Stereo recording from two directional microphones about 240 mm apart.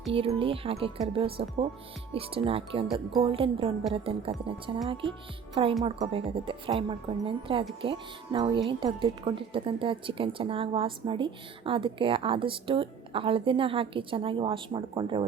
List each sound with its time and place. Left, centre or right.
0.1 s a woman's voice: right
5.8 s a woman's voice: right